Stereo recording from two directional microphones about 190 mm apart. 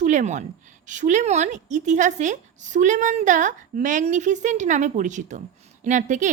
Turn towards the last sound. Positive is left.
turn(degrees=-40)  # may be behind; listen again after turning